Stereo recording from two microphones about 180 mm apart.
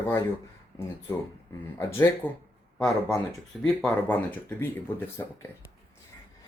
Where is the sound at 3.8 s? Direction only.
10° left (ahead or behind).